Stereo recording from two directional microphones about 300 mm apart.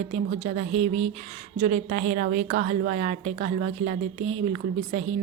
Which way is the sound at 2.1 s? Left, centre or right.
Right.